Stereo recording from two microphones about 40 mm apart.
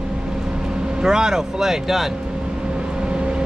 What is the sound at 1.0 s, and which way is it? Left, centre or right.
Speech, centre.